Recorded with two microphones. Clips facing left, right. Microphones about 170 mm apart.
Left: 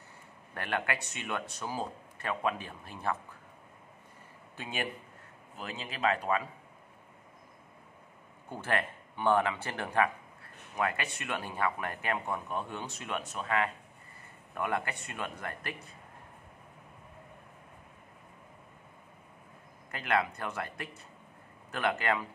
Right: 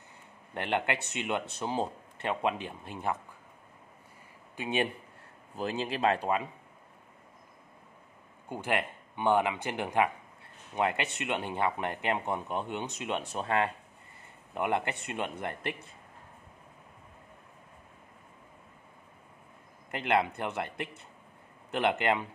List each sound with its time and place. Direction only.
0.6 s speech: 20° right (ahead or behind)
4.6 s speech: 20° right (ahead or behind)
5.6 s a man's voice: 35° right (ahead or behind)
8.5 s speech: 15° right (ahead or behind)
19.9 s speech: 25° right (ahead or behind)